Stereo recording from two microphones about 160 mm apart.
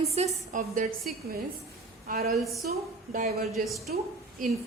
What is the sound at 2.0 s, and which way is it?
Speech, 70° right (ahead or behind).